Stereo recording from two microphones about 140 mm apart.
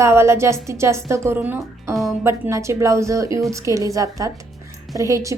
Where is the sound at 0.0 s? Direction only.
20° right (ahead or behind).